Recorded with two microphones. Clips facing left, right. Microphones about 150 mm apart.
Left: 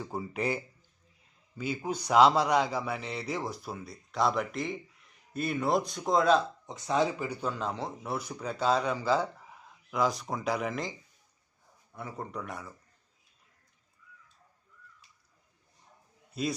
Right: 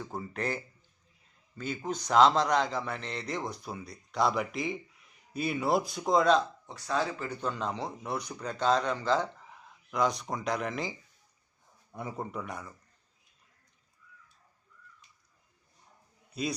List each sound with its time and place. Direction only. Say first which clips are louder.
0.0 s a man's voice: left 2 dB; 10° left (ahead or behind)
6.7 s speech: left 3 dB; 20° left (ahead or behind)
7.4 s a man's voice: right 1 dB; centre (ahead or behind)
11.9 s speech: right 2 dB; 15° right (ahead or behind); by 12.7 s centre (ahead or behind)
16.3 s a man's voice: left 1 dB; centre (ahead or behind)